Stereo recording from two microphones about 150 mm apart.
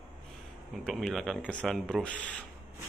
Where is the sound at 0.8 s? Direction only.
5° left (ahead or behind).